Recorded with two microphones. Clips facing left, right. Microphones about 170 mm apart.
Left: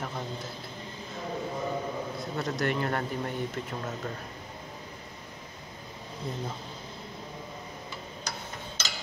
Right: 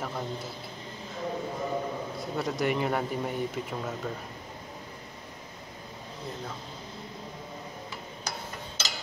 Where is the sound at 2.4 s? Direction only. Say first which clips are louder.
Right 2 dB; 10° right (ahead or behind).